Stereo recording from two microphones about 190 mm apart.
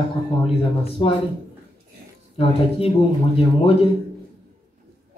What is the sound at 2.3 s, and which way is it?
Speech, 30° left (ahead or behind).